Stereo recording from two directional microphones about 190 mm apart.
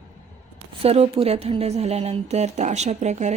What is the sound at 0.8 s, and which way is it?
Speech, 30° right (ahead or behind).